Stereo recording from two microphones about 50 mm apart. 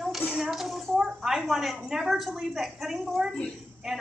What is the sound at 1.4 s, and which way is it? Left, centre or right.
A woman's voice, centre.